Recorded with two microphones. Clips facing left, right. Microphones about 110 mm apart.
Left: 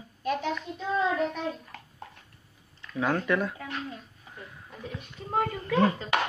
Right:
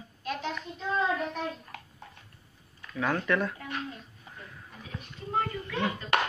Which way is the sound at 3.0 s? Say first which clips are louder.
Left 2 dB; 15° left (ahead or behind).